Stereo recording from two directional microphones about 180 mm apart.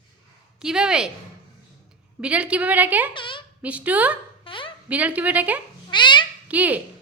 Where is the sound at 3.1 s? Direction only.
30° left (ahead or behind).